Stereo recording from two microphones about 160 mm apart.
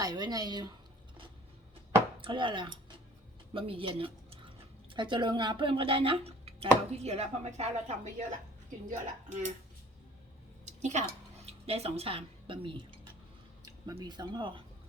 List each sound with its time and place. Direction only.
0.0 s speech: 25° right (ahead or behind)
2.2 s speech: 30° right (ahead or behind); by 9.5 s 50° right (ahead or behind)
10.8 s speech: 45° right (ahead or behind)
13.8 s speech: 25° right (ahead or behind)